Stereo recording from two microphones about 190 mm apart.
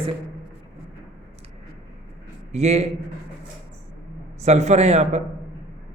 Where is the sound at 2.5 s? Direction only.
35° right (ahead or behind).